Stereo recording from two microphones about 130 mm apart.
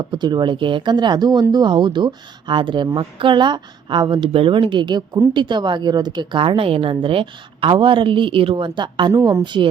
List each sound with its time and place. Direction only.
0.0 s speech: 35° right (ahead or behind)